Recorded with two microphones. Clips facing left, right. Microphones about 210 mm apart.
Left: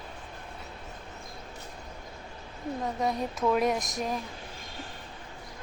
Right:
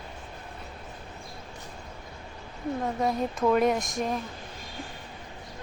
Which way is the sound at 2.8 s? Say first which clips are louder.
Right 2 dB; centre (ahead or behind).